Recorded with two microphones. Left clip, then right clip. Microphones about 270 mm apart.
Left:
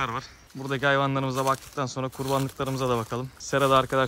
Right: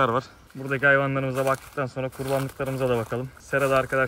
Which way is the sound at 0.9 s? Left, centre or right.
Centre.